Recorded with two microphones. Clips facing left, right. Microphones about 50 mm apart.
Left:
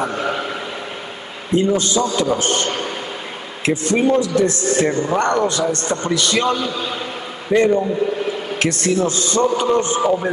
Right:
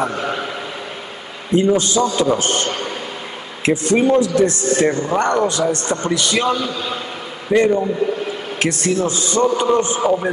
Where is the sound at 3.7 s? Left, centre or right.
Centre.